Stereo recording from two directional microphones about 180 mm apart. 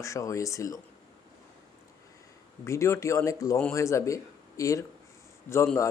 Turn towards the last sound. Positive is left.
turn(degrees=15)  # may be behind; listen again after turning